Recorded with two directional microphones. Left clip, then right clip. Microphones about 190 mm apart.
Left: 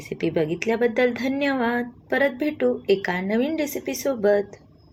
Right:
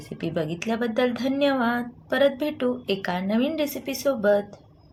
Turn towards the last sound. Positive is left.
turn(degrees=0)  # may be behind; listen again after turning